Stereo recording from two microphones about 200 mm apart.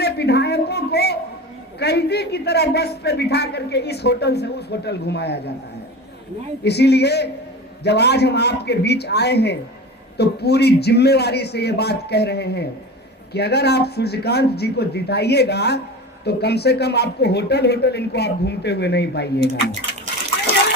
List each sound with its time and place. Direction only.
0.0 s a man's voice: 55° left (ahead or behind)
6.7 s a man's voice: 55° left (ahead or behind)